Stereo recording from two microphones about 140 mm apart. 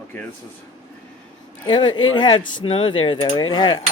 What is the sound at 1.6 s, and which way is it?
Speech, 35° left (ahead or behind).